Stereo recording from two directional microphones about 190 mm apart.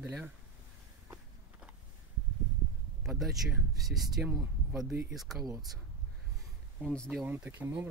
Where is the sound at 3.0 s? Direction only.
Centre (ahead or behind).